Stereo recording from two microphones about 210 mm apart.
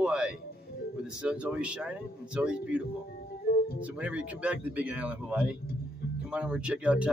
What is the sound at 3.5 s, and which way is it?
Music, 45° left (ahead or behind).